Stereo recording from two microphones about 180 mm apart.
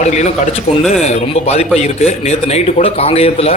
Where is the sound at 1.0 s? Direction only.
35° left (ahead or behind).